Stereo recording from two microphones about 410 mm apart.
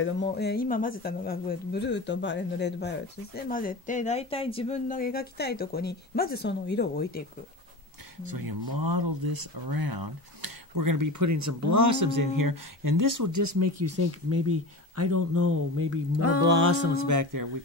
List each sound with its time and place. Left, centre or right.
0.0 s speech: left
8.2 s speech: right